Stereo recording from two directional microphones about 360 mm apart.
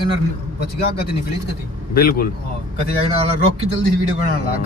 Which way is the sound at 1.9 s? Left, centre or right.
Left.